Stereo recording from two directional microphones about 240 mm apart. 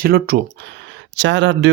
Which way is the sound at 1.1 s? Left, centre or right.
Right.